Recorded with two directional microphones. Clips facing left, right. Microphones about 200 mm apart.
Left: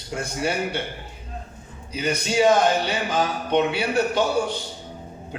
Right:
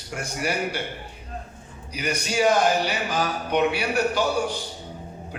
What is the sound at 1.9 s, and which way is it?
A man's voice, 25° left (ahead or behind).